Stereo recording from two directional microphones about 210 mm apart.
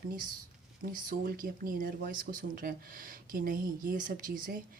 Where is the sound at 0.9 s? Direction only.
40° right (ahead or behind).